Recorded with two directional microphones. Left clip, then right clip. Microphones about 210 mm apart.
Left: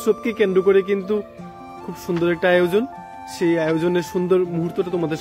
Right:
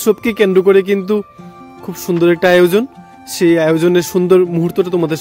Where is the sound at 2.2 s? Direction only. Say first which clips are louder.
Right 8 dB; 55° right (ahead or behind).